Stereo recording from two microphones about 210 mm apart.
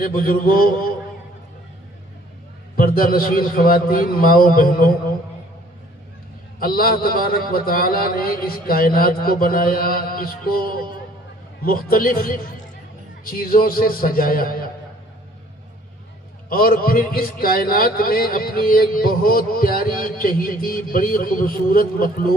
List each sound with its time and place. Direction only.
0.0 s a man's voice: 45° left (ahead or behind)
2.7 s a man's voice: 45° left (ahead or behind)
6.6 s a man's voice: 45° left (ahead or behind)
16.5 s a man's voice: 45° left (ahead or behind)